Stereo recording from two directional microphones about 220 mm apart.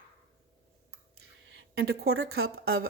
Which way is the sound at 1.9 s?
45° right (ahead or behind).